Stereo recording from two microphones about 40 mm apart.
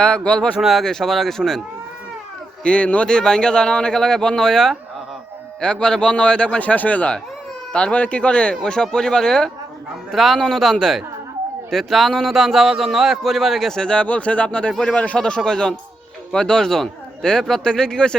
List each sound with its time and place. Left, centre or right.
0.0 s speech: left
0.6 s speech: centre
0.9 s a man's voice: centre
2.6 s speech: left
3.1 s speech: centre
5.5 s speech: left
6.6 s speech: left
7.7 s speech: left
7.9 s speech: left; by 9.5 s centre
10.1 s a man's voice: centre
12.4 s speech: centre
13.8 s speech: left
15.4 s a man's voice: centre